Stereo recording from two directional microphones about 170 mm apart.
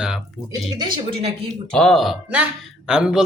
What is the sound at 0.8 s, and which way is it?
Speech, 25° right (ahead or behind).